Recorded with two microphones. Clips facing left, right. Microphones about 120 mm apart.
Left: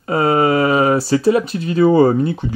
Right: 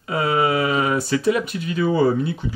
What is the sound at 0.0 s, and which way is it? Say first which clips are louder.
Speech: left 5 dB; 40° left (ahead or behind).